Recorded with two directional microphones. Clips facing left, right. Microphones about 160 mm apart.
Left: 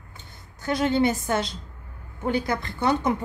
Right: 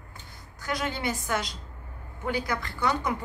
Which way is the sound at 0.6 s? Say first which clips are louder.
Left 9 dB; 25° left (ahead or behind).